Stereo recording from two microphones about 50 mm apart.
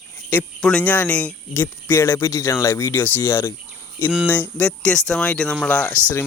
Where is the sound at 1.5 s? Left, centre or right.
Left.